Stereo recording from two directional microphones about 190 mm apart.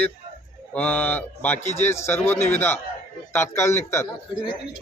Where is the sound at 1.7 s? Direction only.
35° left (ahead or behind).